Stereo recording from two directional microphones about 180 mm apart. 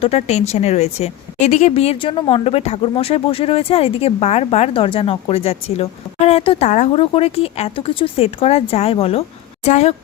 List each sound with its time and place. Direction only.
0.0 s a woman's voice: 35° left (ahead or behind)